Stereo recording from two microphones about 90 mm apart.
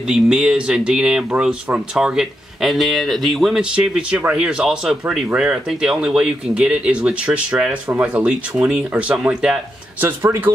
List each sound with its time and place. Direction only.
0.0 s speech: 5° right (ahead or behind)
3.7 s speech: 10° right (ahead or behind)
9.9 s speech: 25° right (ahead or behind)